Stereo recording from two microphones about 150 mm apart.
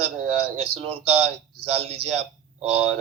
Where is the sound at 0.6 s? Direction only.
40° right (ahead or behind).